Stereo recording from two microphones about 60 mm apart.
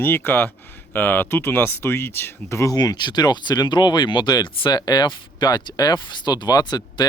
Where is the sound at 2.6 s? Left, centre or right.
Left.